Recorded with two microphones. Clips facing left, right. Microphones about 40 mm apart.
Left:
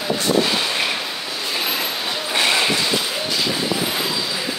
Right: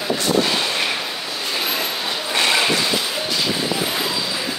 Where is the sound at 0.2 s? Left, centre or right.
Centre.